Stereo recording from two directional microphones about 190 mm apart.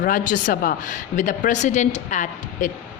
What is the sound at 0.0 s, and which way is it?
Speech, 45° left (ahead or behind).